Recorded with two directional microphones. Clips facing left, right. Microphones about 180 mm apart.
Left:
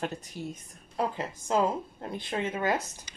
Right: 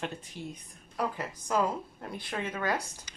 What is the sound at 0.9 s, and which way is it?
A woman's voice, 25° left (ahead or behind).